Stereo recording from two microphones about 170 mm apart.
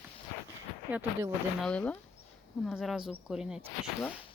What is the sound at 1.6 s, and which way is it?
Speech, 5° left (ahead or behind).